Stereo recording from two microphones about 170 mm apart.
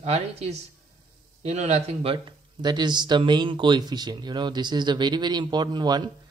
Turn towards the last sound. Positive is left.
turn(degrees=-25)  # may be behind; listen again after turning